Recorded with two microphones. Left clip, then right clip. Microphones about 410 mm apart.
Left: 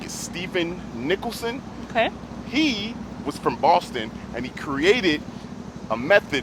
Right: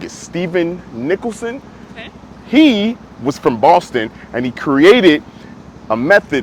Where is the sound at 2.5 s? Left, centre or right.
Right.